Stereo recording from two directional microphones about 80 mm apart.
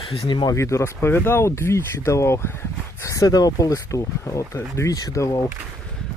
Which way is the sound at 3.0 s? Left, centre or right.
Left.